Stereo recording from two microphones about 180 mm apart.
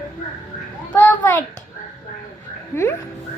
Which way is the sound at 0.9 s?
10° left (ahead or behind).